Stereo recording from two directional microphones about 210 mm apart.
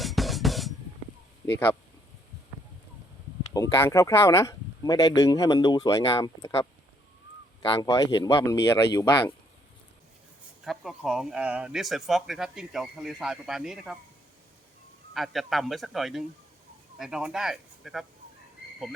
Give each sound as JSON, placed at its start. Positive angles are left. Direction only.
{"t": 0.0, "sound": "music", "side_deg": 0}
{"t": 3.5, "sound": "speech", "side_deg": 15}
{"t": 10.6, "sound": "speech", "side_deg": 0}
{"t": 15.1, "sound": "speech", "side_deg": 0}